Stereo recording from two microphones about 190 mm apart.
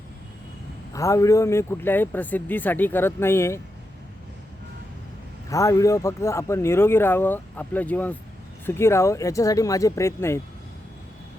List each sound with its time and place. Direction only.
0.9 s speech: 15° left (ahead or behind)
5.5 s speech: 15° left (ahead or behind)